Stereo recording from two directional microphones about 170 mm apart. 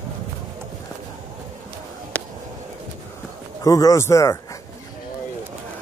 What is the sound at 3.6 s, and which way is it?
Speech, 20° left (ahead or behind).